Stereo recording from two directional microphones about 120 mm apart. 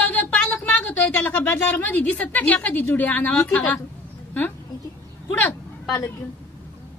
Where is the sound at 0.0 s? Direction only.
15° left (ahead or behind).